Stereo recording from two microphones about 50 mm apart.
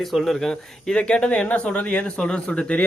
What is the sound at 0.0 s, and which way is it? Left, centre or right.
A man's voice, centre.